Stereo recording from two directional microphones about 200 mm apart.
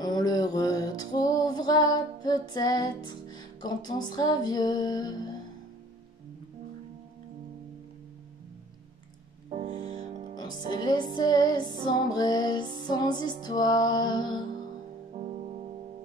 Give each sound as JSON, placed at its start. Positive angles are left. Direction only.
{"t": 0.0, "sound": "music", "side_deg": 20}
{"t": 9.5, "sound": "music", "side_deg": -30}
{"t": 10.3, "sound": "music", "side_deg": 20}
{"t": 15.1, "sound": "music", "side_deg": -30}